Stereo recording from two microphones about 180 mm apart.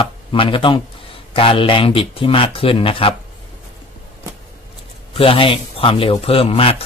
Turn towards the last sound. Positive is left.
turn(degrees=30)  # may be behind; listen again after turning